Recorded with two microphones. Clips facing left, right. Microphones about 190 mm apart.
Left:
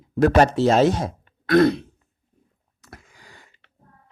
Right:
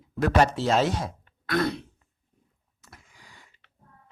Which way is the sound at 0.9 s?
45° left (ahead or behind).